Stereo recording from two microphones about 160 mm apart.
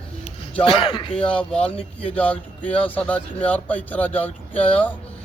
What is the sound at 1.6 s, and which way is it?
Speech, 35° left (ahead or behind).